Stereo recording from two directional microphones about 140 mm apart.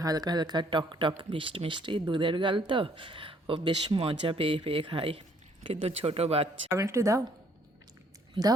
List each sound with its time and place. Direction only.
0.0 s speech: 30° right (ahead or behind); by 6.5 s 45° right (ahead or behind)
6.7 s speech: 20° right (ahead or behind)